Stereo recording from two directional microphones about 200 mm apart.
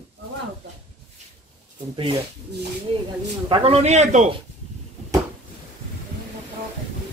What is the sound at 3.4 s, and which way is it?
Speech, 25° right (ahead or behind).